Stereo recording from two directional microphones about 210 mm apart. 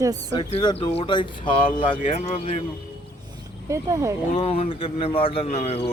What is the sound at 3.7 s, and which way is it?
Speech, 15° right (ahead or behind).